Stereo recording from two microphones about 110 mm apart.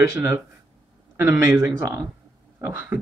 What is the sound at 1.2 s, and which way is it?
Music, 20° right (ahead or behind).